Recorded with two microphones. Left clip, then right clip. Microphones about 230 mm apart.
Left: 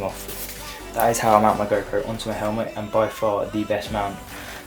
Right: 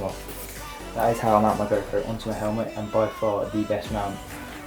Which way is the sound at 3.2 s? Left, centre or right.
Right.